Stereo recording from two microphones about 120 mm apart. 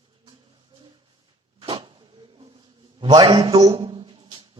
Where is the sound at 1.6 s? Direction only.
50° right (ahead or behind).